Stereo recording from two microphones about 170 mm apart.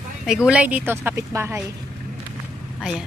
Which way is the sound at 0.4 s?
5° right (ahead or behind).